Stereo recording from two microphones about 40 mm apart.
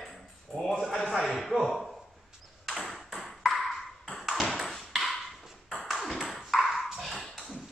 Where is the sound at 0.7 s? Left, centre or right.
Centre.